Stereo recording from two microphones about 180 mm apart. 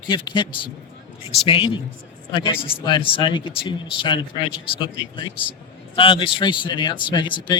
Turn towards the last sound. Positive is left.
turn(degrees=25)  # may be behind; listen again after turning